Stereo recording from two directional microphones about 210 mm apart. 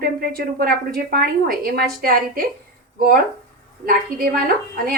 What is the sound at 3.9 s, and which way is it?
Speech, 40° right (ahead or behind).